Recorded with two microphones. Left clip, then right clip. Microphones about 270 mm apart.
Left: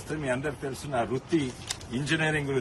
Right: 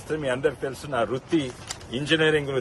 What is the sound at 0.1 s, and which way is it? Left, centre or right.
Speech, right.